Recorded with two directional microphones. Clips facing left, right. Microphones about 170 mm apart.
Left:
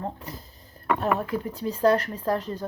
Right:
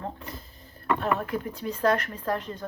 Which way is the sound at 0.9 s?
40° left (ahead or behind).